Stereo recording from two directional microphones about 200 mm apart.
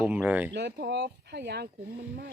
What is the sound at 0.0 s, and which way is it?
Speech, 5° right (ahead or behind).